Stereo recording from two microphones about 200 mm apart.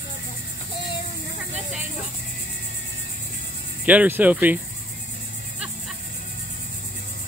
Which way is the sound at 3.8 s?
10° right (ahead or behind).